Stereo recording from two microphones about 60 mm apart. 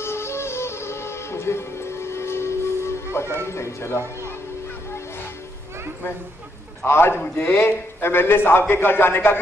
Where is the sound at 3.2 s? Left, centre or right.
Right.